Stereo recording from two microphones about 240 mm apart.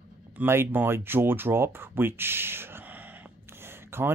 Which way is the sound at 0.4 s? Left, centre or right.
Centre.